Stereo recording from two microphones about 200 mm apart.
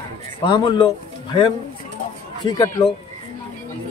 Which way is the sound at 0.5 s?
25° left (ahead or behind).